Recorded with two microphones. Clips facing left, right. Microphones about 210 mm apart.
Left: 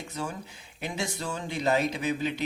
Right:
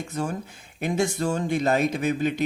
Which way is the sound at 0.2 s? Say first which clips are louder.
Right 6 dB; 50° right (ahead or behind).